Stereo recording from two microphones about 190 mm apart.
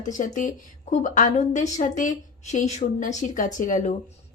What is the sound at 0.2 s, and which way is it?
Speech, 45° left (ahead or behind).